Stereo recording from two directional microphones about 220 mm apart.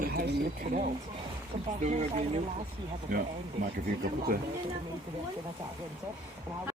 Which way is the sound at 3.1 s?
40° right (ahead or behind).